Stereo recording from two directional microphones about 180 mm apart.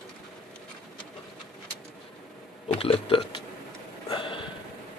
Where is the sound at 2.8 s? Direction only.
30° left (ahead or behind).